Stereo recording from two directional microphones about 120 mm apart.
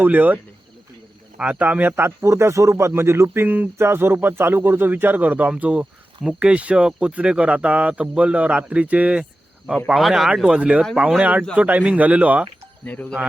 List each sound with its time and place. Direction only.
0.0 s speech: 15° right (ahead or behind)
1.4 s speech: 15° right (ahead or behind)
12.8 s speech: 10° left (ahead or behind)